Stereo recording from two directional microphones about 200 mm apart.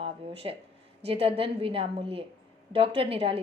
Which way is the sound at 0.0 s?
30° right (ahead or behind).